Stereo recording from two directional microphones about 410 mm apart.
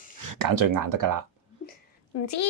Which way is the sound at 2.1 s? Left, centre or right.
Left.